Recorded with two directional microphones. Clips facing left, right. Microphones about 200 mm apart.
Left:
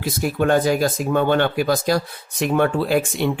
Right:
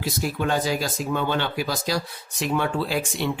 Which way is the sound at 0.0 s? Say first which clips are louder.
Left 5 dB; 55° left (ahead or behind).